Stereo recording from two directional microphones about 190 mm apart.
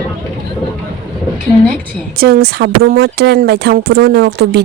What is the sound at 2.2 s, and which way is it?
Speech, 55° right (ahead or behind).